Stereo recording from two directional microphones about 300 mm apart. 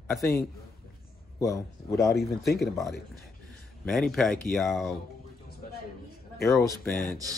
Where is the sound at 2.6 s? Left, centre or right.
Centre.